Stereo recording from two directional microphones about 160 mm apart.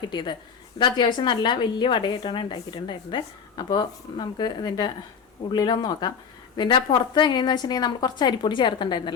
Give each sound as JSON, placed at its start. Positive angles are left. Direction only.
{"t": 0.1, "sound": "a woman's voice", "side_deg": 30}